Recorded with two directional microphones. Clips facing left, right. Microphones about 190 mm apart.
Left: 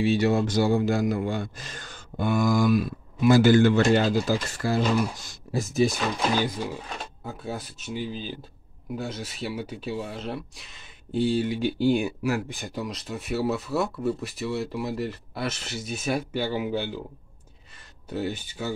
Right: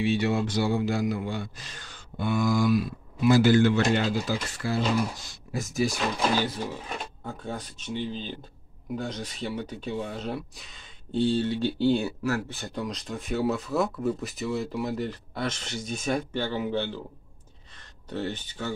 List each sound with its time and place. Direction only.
0.0 s a man's voice: 40° left (ahead or behind)
5.5 s speech: 25° left (ahead or behind)
7.2 s speech: 5° left (ahead or behind)
18.1 s speech: 10° left (ahead or behind)